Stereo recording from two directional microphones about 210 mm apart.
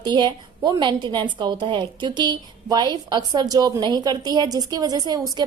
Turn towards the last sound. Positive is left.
turn(degrees=-20)  # may be behind; listen again after turning